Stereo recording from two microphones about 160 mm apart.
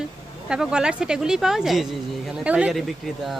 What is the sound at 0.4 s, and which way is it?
Speech, 5° right (ahead or behind).